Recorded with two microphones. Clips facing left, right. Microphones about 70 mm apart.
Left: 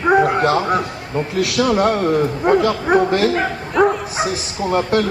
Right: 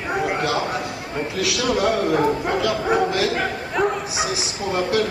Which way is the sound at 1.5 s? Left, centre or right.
Left.